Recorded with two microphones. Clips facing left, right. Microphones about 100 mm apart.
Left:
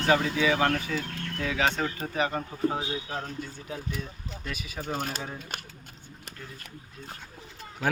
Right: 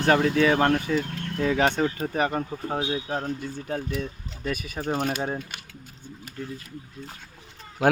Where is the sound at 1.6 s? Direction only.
55° right (ahead or behind).